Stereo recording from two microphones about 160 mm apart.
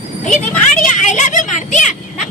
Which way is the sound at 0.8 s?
50° left (ahead or behind).